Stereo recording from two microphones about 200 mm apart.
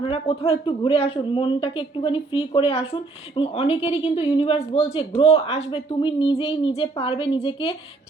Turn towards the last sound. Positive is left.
turn(degrees=25)  # may be behind; listen again after turning